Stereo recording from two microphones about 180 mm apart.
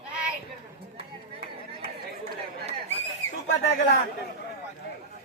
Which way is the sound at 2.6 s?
40° right (ahead or behind).